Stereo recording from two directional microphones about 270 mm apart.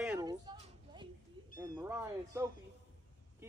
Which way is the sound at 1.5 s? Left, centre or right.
Centre.